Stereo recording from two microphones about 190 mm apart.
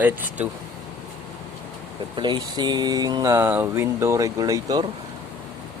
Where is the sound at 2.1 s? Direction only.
25° right (ahead or behind).